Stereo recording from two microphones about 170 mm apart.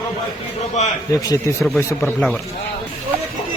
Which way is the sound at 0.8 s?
45° left (ahead or behind).